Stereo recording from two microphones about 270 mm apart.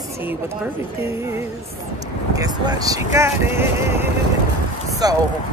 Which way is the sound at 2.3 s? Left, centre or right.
Centre.